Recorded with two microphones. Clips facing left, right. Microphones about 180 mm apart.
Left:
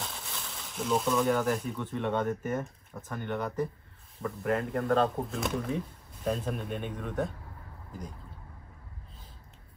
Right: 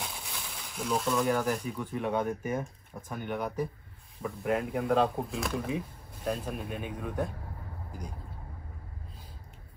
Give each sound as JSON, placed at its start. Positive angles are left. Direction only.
{"t": 0.0, "sound": "speech", "side_deg": -5}